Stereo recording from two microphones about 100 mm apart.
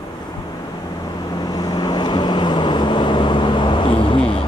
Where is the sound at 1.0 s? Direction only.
45° left (ahead or behind); by 4.5 s 65° left (ahead or behind).